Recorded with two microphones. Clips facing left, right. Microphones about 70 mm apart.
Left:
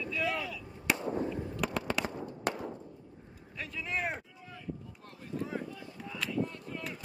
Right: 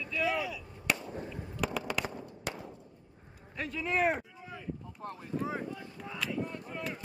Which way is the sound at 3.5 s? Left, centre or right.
Right.